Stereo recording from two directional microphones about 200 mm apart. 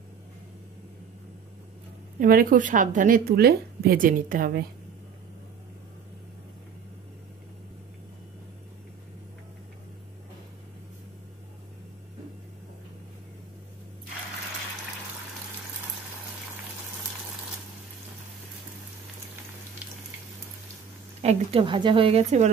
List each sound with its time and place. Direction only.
2.1 s a woman's voice: 45° right (ahead or behind)
21.2 s a woman's voice: 30° right (ahead or behind)